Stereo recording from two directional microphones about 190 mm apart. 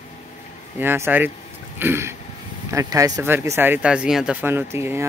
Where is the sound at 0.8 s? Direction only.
10° right (ahead or behind).